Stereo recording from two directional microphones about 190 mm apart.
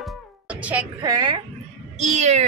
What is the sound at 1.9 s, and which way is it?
Meow, 35° right (ahead or behind).